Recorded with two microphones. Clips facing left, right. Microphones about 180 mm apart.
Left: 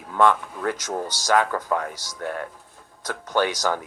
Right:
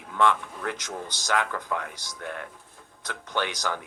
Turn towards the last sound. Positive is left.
turn(degrees=40)  # may be behind; listen again after turning